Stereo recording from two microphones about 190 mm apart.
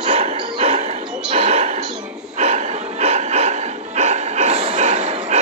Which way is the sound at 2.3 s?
35° right (ahead or behind).